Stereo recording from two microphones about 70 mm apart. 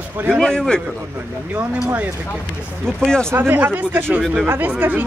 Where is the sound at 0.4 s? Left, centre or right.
Centre.